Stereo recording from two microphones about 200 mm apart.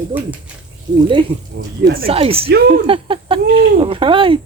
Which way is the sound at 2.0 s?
30° right (ahead or behind).